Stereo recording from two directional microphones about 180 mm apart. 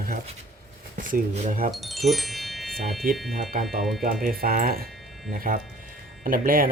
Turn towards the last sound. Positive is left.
turn(degrees=-50)  # may be behind; listen again after turning